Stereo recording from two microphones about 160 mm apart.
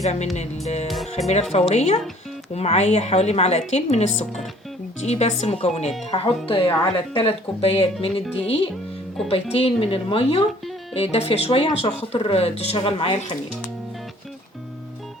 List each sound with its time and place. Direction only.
0.0 s a woman's voice: 45° left (ahead or behind)